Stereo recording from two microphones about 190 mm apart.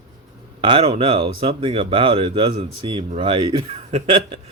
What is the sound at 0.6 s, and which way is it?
A man's voice, 25° right (ahead or behind).